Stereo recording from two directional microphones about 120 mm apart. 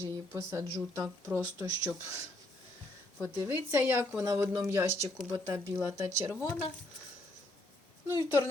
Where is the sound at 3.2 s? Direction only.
20° right (ahead or behind).